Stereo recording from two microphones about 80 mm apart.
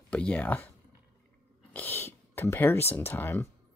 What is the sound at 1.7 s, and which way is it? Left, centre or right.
Speech, left.